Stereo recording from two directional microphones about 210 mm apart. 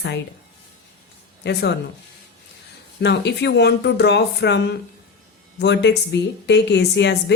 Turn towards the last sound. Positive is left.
turn(degrees=55)  # may be behind; listen again after turning